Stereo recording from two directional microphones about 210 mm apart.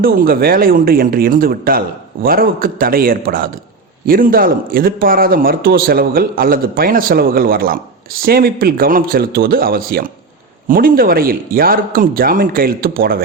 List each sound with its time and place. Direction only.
0.0 s speech: 45° right (ahead or behind)